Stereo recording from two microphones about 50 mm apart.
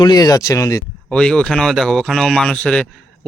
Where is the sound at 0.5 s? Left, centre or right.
Left.